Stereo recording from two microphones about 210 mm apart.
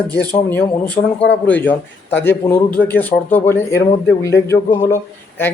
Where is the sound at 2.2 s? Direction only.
10° left (ahead or behind).